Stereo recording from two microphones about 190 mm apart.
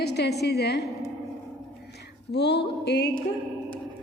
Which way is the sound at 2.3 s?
60° left (ahead or behind).